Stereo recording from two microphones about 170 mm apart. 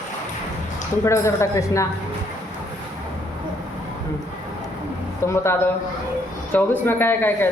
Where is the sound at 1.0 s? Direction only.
15° left (ahead or behind).